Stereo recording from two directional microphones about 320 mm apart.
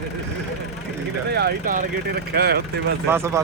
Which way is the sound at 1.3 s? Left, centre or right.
Right.